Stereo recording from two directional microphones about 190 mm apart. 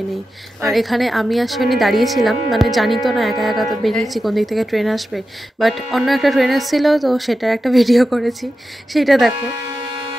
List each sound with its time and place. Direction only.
0.6 s a woman's voice: centre (ahead or behind)